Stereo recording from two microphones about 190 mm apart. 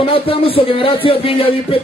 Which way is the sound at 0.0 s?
30° left (ahead or behind).